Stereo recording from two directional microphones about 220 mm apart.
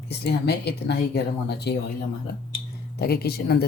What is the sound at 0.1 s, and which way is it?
Speech, 50° left (ahead or behind).